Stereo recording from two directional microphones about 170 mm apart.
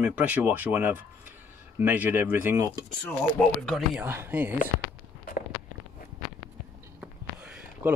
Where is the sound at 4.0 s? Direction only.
10° right (ahead or behind).